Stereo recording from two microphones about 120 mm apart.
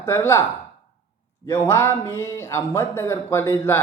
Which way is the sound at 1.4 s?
20° left (ahead or behind).